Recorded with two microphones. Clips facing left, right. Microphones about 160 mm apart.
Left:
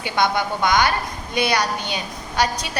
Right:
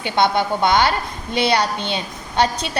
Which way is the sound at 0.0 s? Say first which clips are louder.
Right 3 dB; 25° right (ahead or behind).